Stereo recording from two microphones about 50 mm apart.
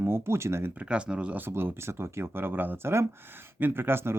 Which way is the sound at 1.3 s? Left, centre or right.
Right.